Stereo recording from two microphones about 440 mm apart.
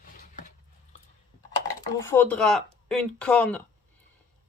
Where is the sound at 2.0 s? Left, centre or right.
Centre.